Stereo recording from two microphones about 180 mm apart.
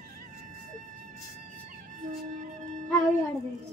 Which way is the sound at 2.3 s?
45° right (ahead or behind).